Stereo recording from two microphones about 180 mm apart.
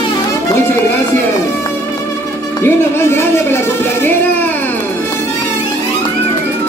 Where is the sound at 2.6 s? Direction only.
15° left (ahead or behind).